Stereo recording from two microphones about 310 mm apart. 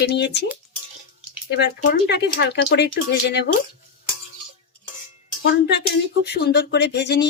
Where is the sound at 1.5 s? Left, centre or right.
Left.